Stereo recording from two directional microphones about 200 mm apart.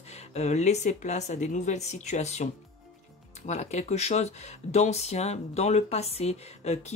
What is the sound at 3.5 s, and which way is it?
Speech, 35° left (ahead or behind).